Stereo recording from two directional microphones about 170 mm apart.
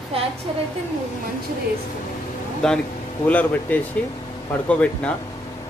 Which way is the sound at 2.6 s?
5° left (ahead or behind).